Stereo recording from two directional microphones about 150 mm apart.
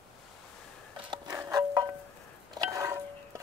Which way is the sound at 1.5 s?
20° right (ahead or behind).